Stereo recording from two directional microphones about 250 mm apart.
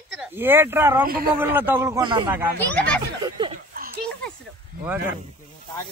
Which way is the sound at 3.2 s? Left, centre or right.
Centre.